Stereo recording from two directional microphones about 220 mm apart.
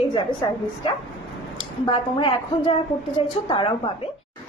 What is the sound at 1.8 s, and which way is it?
A woman's voice, 20° left (ahead or behind).